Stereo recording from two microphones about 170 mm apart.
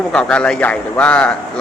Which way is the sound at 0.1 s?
5° left (ahead or behind).